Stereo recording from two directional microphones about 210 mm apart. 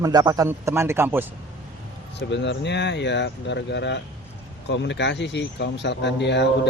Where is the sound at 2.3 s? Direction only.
55° left (ahead or behind).